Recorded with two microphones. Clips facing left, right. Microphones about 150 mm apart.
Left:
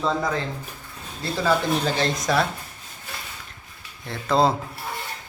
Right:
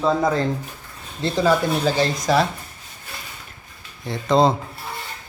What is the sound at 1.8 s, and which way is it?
Speech, 5° right (ahead or behind).